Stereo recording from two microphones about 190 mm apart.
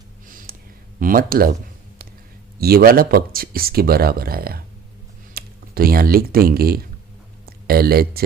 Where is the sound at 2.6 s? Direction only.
55° right (ahead or behind).